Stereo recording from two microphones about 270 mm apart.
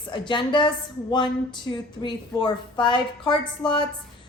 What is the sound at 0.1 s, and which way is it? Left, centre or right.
Speech, centre.